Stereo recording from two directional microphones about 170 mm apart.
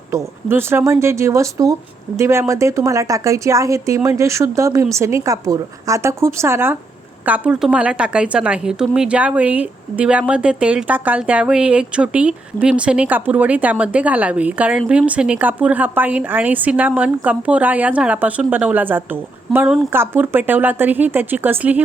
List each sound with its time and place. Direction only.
0.1 s a woman's voice: 15° right (ahead or behind)